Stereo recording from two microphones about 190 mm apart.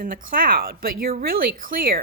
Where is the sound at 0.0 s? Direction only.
45° right (ahead or behind).